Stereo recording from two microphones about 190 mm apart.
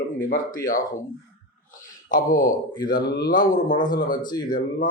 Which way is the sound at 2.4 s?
20° left (ahead or behind).